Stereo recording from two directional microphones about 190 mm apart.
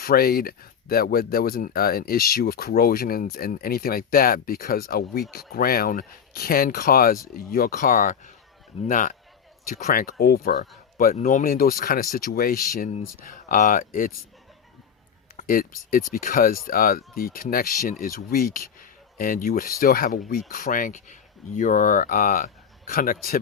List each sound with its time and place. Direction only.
0.0 s speech: 50° left (ahead or behind)
15.4 s speech: 45° left (ahead or behind)